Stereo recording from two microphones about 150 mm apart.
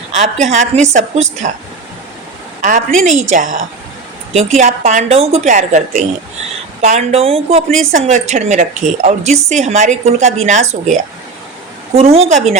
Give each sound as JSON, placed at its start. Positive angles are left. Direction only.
{"t": 0.2, "sound": "a woman's voice", "side_deg": -50}
{"t": 2.6, "sound": "a woman's voice", "side_deg": -60}
{"t": 4.6, "sound": "a woman's voice", "side_deg": -50}
{"t": 6.8, "sound": "a woman's voice", "side_deg": -45}
{"t": 7.9, "sound": "a woman's voice", "side_deg": -50}